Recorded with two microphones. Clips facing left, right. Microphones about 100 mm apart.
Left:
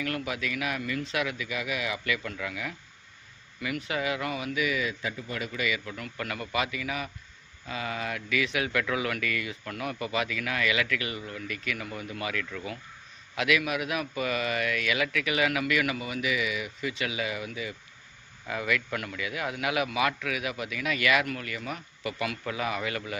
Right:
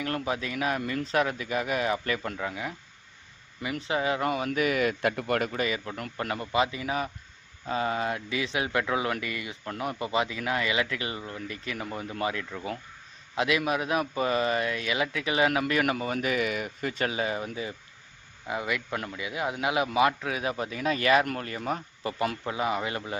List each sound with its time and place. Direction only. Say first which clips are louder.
0.0 s a man's voice: right 2 dB; 30° right (ahead or behind); by 5.5 s 60° right (ahead or behind)
5.5 s a man's voice: right 2 dB; 40° right (ahead or behind)
18.4 s a man's voice: left 1 dB; 25° right (ahead or behind)